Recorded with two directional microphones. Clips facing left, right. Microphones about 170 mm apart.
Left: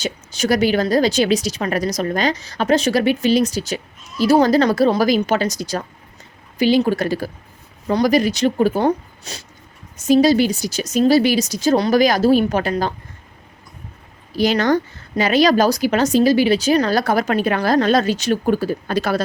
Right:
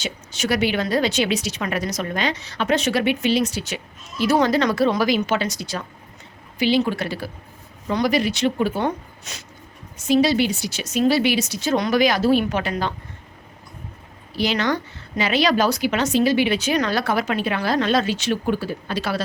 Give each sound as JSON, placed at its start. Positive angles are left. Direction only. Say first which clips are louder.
{"t": 0.0, "sound": "a woman's voice", "louder": "left 4 dB", "side_deg": 40}
{"t": 14.3, "sound": "speech", "louder": "left 5 dB", "side_deg": 45}